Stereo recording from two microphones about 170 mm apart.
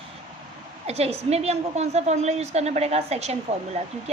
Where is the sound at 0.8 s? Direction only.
40° right (ahead or behind).